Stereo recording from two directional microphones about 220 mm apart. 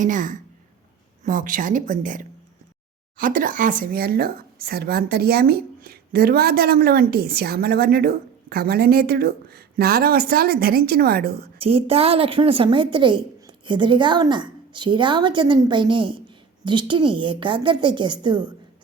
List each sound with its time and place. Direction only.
0.0 s speech: 35° right (ahead or behind)
11.6 s a woman's voice: 25° right (ahead or behind)